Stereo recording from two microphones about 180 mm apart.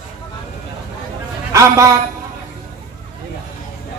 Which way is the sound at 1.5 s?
15° right (ahead or behind).